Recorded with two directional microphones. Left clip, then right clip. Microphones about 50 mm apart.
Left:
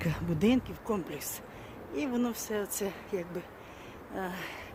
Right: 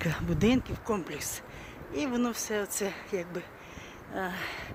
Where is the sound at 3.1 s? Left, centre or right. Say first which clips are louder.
Right 1 dB; right.